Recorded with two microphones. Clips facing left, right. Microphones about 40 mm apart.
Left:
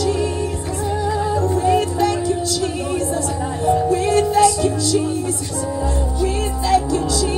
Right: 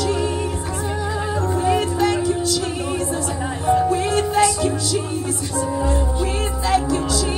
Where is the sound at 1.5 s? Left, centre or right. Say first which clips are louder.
Left 2 dB; right.